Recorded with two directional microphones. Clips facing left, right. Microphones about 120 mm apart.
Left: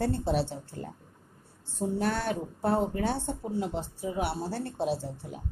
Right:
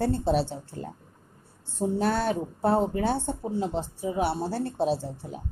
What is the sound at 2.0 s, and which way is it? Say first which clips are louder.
Speech: right 4 dB; 30° right (ahead or behind).